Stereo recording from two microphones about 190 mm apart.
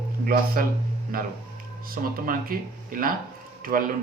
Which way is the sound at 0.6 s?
50° right (ahead or behind).